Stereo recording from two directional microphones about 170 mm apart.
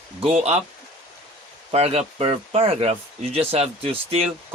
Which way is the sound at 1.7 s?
35° right (ahead or behind).